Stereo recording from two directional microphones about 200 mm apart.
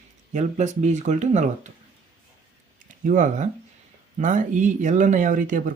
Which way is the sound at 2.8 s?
40° right (ahead or behind).